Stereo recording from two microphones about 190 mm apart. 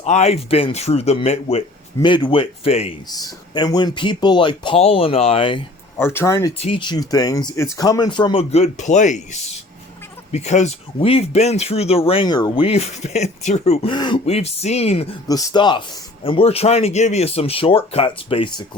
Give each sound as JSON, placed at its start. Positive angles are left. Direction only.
{"t": 0.0, "sound": "speech", "side_deg": 35}
{"t": 3.1, "sound": "a man's voice", "side_deg": 20}
{"t": 6.0, "sound": "speech", "side_deg": 10}
{"t": 6.6, "sound": "a man's voice", "side_deg": 25}
{"t": 13.9, "sound": "speech", "side_deg": 25}
{"t": 15.3, "sound": "a man's voice", "side_deg": 20}